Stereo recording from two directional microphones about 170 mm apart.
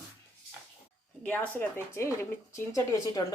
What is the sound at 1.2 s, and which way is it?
A woman's voice, 10° left (ahead or behind).